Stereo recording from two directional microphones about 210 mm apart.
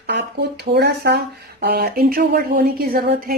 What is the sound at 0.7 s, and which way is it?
Speech, 50° right (ahead or behind).